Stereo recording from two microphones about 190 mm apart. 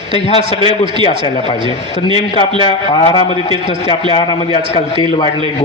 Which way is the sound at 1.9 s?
30° left (ahead or behind).